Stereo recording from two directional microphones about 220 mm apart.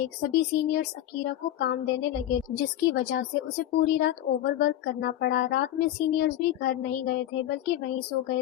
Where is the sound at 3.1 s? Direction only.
50° left (ahead or behind).